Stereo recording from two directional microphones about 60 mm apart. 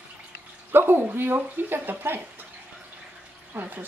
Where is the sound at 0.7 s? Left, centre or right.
Right.